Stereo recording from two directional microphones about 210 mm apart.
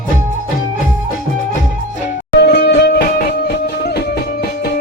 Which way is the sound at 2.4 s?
55° left (ahead or behind).